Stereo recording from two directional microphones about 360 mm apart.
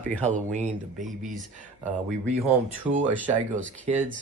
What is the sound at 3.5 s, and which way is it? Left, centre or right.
Speech, right.